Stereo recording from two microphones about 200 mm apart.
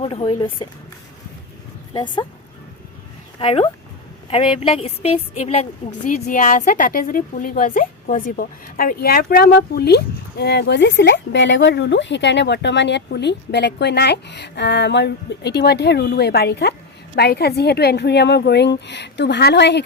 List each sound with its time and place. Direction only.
0.0 s a woman's voice: 30° left (ahead or behind)
1.9 s speech: 20° left (ahead or behind)
3.3 s a woman's voice: 30° left (ahead or behind); by 19.8 s 60° left (ahead or behind)